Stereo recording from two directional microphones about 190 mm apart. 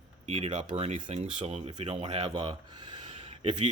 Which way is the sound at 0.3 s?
35° right (ahead or behind).